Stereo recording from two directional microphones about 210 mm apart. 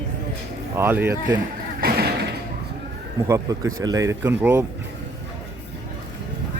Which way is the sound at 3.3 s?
15° right (ahead or behind).